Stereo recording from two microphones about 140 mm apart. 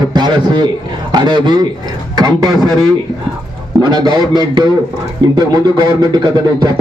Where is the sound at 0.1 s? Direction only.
30° right (ahead or behind).